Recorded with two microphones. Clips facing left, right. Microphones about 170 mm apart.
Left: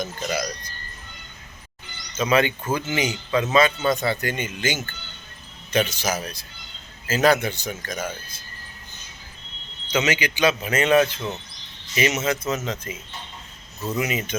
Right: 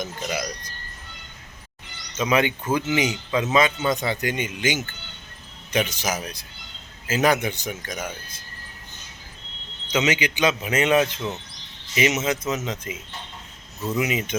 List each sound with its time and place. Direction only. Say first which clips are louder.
0.0 s a man's voice: left 2 dB; 15° right (ahead or behind)
2.1 s a man's voice: left 1 dB; 15° right (ahead or behind)
9.9 s a man's voice: even; 20° right (ahead or behind)